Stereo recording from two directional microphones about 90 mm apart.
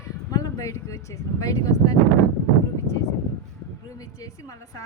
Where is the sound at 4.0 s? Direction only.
40° left (ahead or behind).